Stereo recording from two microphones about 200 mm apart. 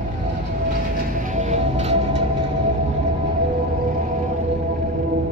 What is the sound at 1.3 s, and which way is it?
Music, 35° right (ahead or behind).